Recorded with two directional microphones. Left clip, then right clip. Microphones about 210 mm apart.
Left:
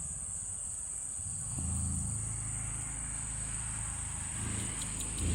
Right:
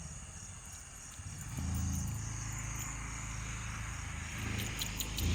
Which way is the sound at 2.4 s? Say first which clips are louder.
Left 1 dB; 45° left (ahead or behind).